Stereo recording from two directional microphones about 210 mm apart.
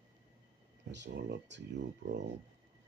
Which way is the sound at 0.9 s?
55° right (ahead or behind).